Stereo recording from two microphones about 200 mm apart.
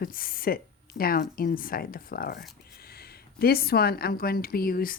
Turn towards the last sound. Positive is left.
turn(degrees=50)  # may be behind; listen again after turning